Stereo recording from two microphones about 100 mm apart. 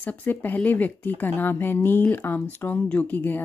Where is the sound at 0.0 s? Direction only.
15° left (ahead or behind).